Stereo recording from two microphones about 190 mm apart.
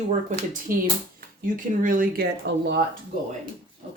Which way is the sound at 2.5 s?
70° right (ahead or behind).